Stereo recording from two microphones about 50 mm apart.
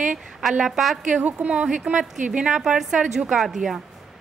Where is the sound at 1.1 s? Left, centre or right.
Right; by 3.8 s centre.